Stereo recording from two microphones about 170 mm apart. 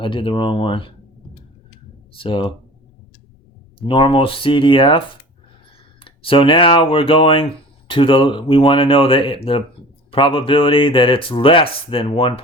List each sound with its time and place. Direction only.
0.0 s speech: 30° left (ahead or behind)
2.1 s speech: 30° left (ahead or behind)
3.8 s speech: 30° left (ahead or behind)
6.1 s speech: 30° left (ahead or behind)